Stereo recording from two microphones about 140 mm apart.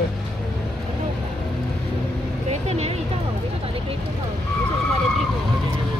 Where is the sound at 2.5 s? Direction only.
50° right (ahead or behind).